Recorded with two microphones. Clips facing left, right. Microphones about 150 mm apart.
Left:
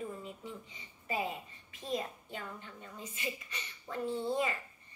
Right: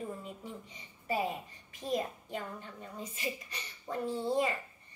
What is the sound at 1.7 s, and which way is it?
A woman's voice, 40° right (ahead or behind).